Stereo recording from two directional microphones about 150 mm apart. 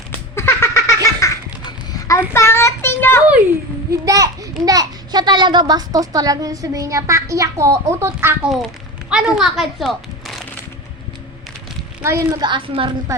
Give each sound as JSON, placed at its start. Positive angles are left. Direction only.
{"t": 0.3, "sound": "cat", "side_deg": 15}
{"t": 1.2, "sound": "a sound", "side_deg": 25}
{"t": 2.3, "sound": "child singing", "side_deg": 15}
{"t": 3.9, "sound": "a child's voice", "side_deg": -25}
{"t": 12.0, "sound": "a child's voice", "side_deg": -20}
{"t": 13.1, "sound": "a woman's voice", "side_deg": -20}